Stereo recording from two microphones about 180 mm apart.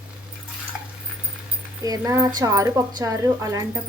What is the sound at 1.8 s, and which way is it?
Speech, 20° right (ahead or behind).